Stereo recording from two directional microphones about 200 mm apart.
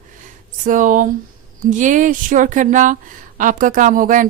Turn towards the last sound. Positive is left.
turn(degrees=-40)  # may be behind; listen again after turning